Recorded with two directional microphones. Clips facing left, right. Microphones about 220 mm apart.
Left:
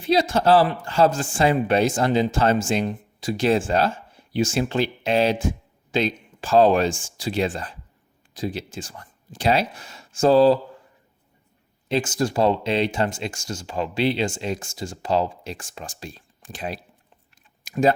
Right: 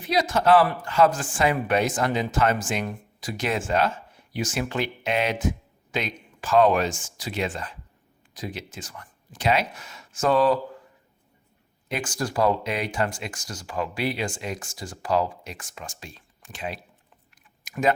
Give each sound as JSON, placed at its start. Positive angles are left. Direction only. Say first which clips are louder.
{"t": 0.0, "sound": "a man's voice", "louder": "left 3 dB", "side_deg": 30}
{"t": 11.9, "sound": "a man's voice", "louder": "left 6 dB", "side_deg": 25}
{"t": 17.3, "sound": "a sound", "louder": "left 6 dB", "side_deg": 30}